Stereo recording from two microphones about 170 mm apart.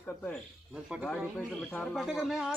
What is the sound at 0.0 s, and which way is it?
Speech, 10° left (ahead or behind).